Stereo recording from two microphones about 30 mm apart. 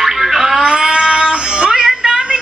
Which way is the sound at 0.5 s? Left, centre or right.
Right.